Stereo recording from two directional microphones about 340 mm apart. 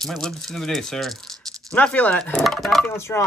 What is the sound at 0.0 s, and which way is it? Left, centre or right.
Speech, centre.